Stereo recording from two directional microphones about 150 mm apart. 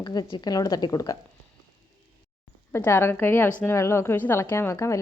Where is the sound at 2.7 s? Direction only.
15° left (ahead or behind).